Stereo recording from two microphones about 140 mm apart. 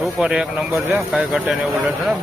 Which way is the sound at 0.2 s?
5° right (ahead or behind).